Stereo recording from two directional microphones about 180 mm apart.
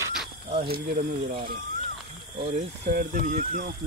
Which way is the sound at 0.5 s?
55° right (ahead or behind).